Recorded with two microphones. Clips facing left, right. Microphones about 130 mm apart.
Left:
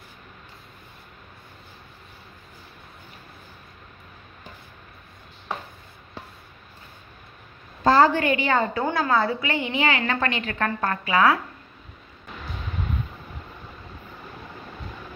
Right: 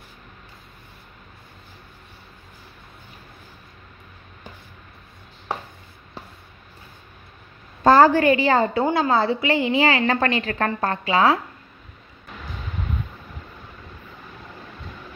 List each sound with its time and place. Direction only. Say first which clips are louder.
7.8 s a woman's voice: right 4 dB; 45° right (ahead or behind); by 11.3 s 30° right (ahead or behind)